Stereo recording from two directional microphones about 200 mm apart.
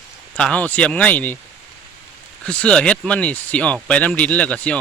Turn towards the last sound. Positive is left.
turn(degrees=5)  # may be behind; listen again after turning